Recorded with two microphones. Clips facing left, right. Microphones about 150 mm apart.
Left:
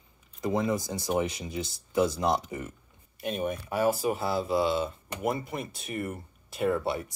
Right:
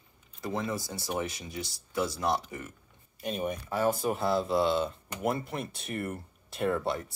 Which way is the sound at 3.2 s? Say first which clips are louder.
Left 2 dB; centre (ahead or behind).